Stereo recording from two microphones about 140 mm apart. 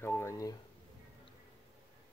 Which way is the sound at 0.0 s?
15° left (ahead or behind).